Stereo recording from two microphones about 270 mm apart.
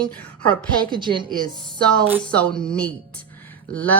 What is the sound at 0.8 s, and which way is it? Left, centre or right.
Speech, centre.